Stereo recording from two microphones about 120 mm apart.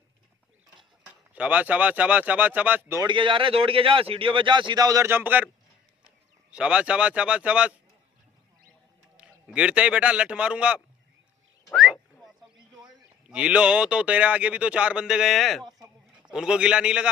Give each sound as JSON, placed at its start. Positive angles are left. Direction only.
{"t": 1.0, "sound": "speech", "side_deg": -10}
{"t": 3.0, "sound": "speech", "side_deg": -45}
{"t": 6.5, "sound": "speech", "side_deg": -10}
{"t": 9.1, "sound": "a man's voice", "side_deg": -10}
{"t": 11.7, "sound": "a sound", "side_deg": 5}
{"t": 12.8, "sound": "speech", "side_deg": -10}
{"t": 15.8, "sound": "a sound", "side_deg": -5}